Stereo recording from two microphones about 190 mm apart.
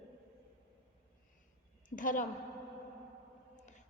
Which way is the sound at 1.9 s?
45° left (ahead or behind).